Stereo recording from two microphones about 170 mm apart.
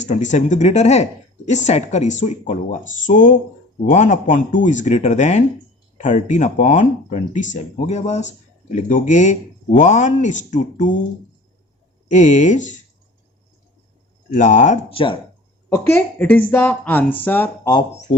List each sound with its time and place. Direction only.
0.0 s speech: 45° left (ahead or behind)
12.1 s speech: 45° left (ahead or behind)
14.3 s speech: 45° left (ahead or behind)
14.9 s speech: 30° left (ahead or behind)
15.7 s speech: 10° left (ahead or behind)